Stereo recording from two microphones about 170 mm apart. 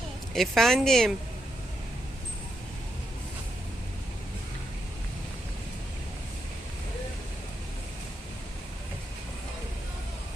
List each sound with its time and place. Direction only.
0.3 s a woman's voice: centre (ahead or behind)